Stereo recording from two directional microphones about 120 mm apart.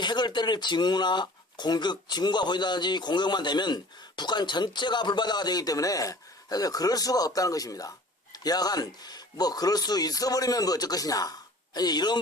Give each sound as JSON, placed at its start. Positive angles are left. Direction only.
{"t": 0.0, "sound": "speech", "side_deg": 40}